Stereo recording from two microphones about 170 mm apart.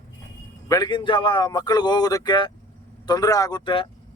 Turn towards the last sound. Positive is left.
turn(degrees=25)  # may be behind; listen again after turning